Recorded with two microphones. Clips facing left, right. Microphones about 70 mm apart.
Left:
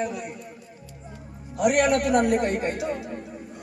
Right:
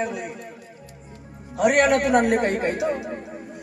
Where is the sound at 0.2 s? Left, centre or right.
Right.